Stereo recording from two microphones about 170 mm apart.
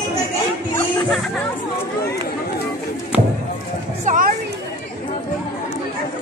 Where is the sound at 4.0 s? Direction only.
50° right (ahead or behind).